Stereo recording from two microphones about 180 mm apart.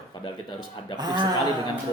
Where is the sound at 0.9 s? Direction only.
25° right (ahead or behind).